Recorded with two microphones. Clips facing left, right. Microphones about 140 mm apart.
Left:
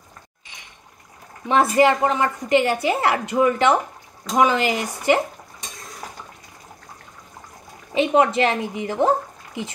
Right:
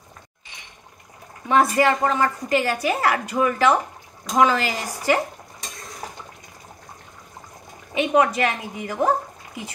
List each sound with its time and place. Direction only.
1.5 s a woman's voice: 25° left (ahead or behind)
7.9 s a woman's voice: 30° left (ahead or behind)